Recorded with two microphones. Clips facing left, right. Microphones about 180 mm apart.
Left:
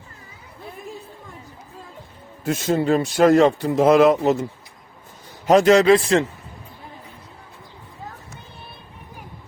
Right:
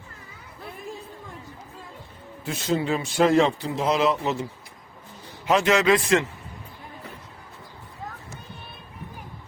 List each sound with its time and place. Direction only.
2.4 s speech: 45° left (ahead or behind)
5.5 s speech: 40° left (ahead or behind)